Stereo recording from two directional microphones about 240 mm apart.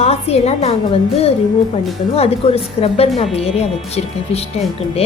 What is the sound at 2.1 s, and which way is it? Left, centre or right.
Speech, left.